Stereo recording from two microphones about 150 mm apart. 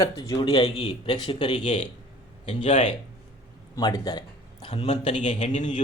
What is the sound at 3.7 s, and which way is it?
Speech, 30° left (ahead or behind).